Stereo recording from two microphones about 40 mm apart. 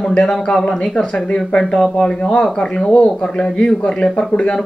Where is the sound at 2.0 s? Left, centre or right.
Left.